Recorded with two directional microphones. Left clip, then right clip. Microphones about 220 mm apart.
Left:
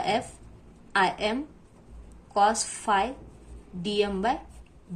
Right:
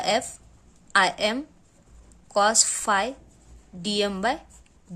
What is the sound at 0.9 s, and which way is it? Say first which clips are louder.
A woman's voice: right 3 dB; 50° right (ahead or behind).